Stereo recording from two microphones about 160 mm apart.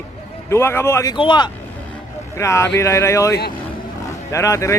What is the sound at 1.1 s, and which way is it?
Speech, 30° left (ahead or behind).